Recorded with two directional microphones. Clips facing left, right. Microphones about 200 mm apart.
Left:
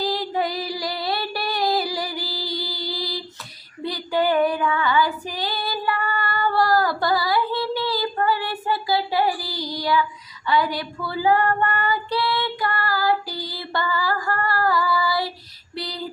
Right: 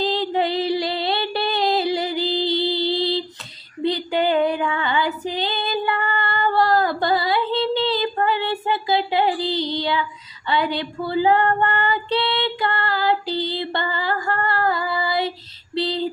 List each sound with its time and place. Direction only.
0.0 s music: 25° right (ahead or behind)
3.8 s female singing: 25° right (ahead or behind)
15.7 s a sound: 25° right (ahead or behind)